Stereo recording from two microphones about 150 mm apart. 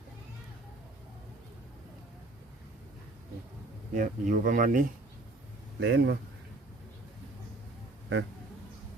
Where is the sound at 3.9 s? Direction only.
60° right (ahead or behind).